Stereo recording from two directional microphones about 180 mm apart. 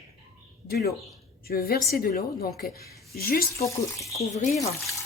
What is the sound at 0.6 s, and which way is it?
A woman's voice, 60° left (ahead or behind).